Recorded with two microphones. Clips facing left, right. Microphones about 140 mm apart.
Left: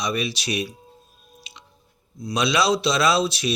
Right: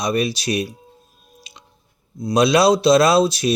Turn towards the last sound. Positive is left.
turn(degrees=-45)  # may be behind; listen again after turning